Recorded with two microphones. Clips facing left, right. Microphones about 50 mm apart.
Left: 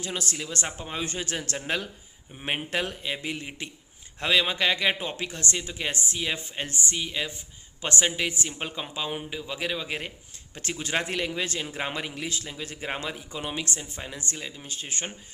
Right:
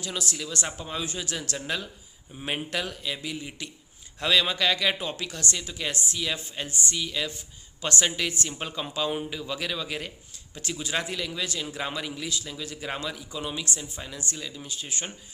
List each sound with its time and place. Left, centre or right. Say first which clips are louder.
0.0 s a man's voice: even; left